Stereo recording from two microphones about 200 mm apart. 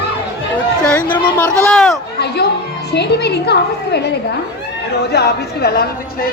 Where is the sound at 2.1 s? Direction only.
55° left (ahead or behind).